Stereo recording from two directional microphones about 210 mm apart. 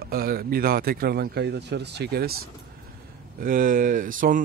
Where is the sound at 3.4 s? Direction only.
40° right (ahead or behind).